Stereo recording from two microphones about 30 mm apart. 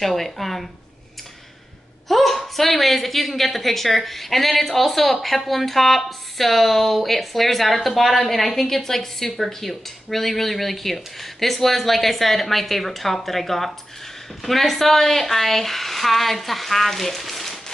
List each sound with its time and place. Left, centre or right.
0.0 s a woman's voice: centre
2.0 s a woman's voice: centre